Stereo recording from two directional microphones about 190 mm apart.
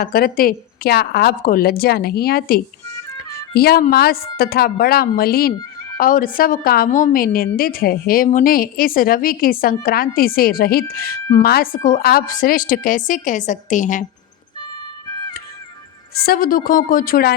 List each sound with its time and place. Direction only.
0.0 s a woman's voice: 50° left (ahead or behind)
16.2 s a woman's voice: 50° left (ahead or behind)